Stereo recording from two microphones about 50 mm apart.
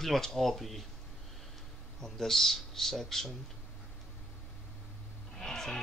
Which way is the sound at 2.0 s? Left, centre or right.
Centre.